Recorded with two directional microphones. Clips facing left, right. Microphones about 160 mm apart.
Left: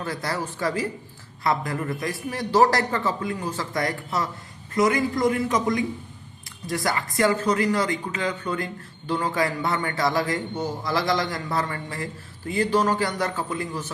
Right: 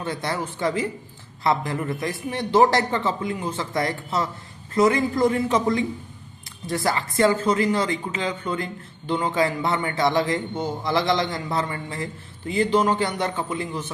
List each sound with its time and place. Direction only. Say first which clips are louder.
0.0 s speech: right 1 dB; 25° right (ahead or behind)